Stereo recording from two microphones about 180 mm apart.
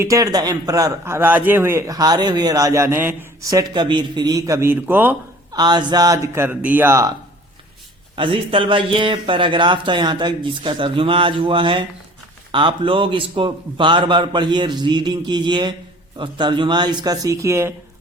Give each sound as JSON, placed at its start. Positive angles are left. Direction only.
{"t": 0.0, "sound": "a man's voice", "side_deg": -20}
{"t": 5.5, "sound": "speech", "side_deg": -25}
{"t": 8.1, "sound": "a man's voice", "side_deg": -30}